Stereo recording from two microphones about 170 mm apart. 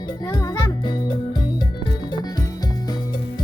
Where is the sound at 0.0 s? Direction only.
25° left (ahead or behind).